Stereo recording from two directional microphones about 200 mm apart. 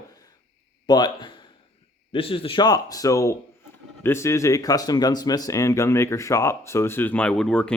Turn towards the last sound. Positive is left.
turn(degrees=5)  # may be behind; listen again after turning